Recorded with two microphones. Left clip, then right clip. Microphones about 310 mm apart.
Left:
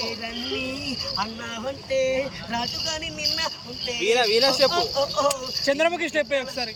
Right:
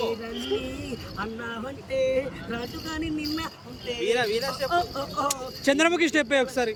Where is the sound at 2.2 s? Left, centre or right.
Centre.